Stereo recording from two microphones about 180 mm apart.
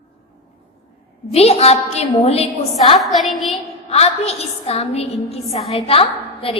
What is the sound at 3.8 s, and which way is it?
A woman's voice, 35° left (ahead or behind).